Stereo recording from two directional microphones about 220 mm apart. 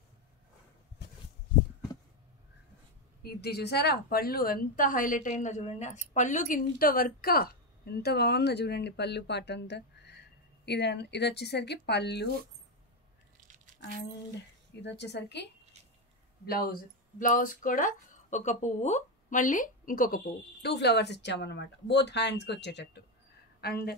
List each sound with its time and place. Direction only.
3.2 s a woman's voice: 45° left (ahead or behind)
14.8 s a woman's voice: 50° left (ahead or behind)
20.6 s a woman's voice: 50° left (ahead or behind)